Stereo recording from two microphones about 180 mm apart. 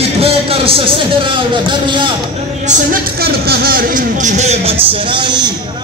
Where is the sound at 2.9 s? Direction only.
60° right (ahead or behind); by 4.7 s 40° right (ahead or behind).